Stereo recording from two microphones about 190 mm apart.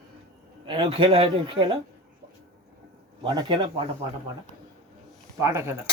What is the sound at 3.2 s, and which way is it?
Speech, 25° right (ahead or behind).